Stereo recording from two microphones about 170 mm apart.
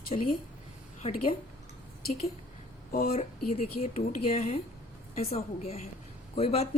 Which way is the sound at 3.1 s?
35° left (ahead or behind).